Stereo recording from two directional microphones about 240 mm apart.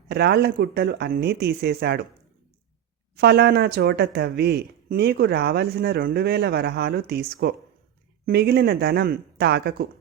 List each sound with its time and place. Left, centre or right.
0.1 s speech: right
3.2 s speech: right